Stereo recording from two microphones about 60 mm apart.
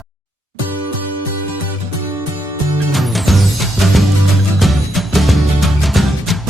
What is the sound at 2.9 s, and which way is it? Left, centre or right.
Music, centre.